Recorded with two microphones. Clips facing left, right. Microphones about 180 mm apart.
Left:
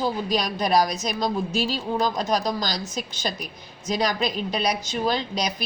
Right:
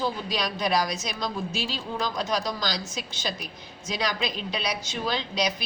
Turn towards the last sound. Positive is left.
turn(degrees=45)  # may be behind; listen again after turning